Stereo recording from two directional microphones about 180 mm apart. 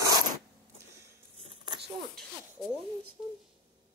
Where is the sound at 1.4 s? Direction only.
25° right (ahead or behind).